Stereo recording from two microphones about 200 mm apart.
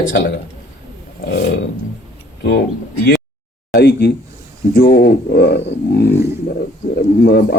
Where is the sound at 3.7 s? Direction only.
55° left (ahead or behind).